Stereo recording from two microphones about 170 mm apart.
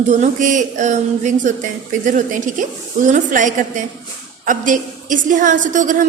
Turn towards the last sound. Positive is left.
turn(degrees=-50)  # may be behind; listen again after turning